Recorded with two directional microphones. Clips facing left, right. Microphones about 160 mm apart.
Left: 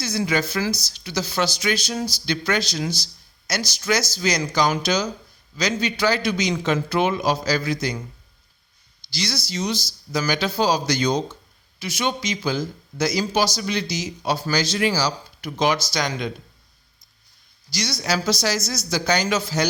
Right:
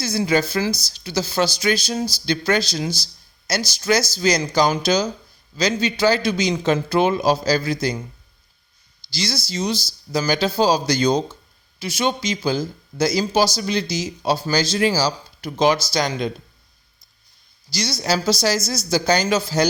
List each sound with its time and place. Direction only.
0.0 s speech: 30° right (ahead or behind)
3.0 s a sound: 30° right (ahead or behind)
3.7 s speech: 30° right (ahead or behind)
9.1 s speech: 30° right (ahead or behind)
17.7 s speech: 30° right (ahead or behind)